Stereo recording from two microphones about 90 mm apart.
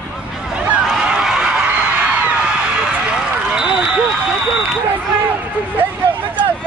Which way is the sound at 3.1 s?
10° right (ahead or behind).